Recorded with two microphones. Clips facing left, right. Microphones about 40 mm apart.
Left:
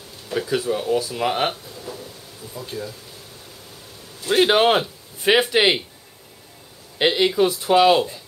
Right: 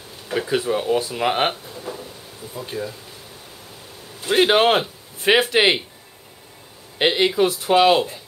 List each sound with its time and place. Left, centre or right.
0.3 s speech: right
1.9 s a sound: right
2.5 s speech: right
4.5 s speech: centre
7.0 s speech: centre